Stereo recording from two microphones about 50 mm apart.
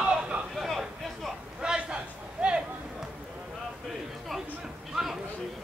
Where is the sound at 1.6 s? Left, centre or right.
Centre.